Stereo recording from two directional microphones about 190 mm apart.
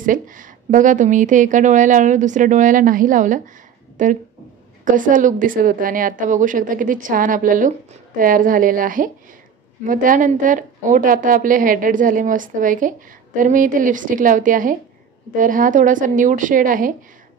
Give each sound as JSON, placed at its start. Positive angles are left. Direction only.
{"t": 0.0, "sound": "a woman's voice", "side_deg": -45}